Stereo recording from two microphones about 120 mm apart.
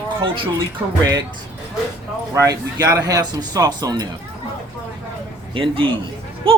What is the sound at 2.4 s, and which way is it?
Speech, 25° right (ahead or behind).